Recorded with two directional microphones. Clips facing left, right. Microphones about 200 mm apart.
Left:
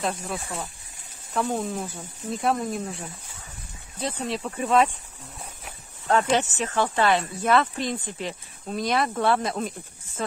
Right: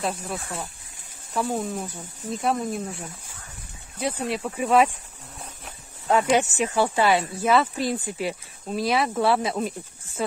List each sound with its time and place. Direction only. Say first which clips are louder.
0.0 s speech: even; centre (ahead or behind)
6.0 s speech: right 2 dB; 10° right (ahead or behind)